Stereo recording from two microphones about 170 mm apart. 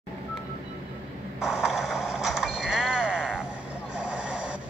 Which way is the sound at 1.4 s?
5° right (ahead or behind).